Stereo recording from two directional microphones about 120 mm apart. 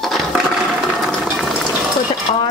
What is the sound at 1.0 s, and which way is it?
Boiling, centre (ahead or behind).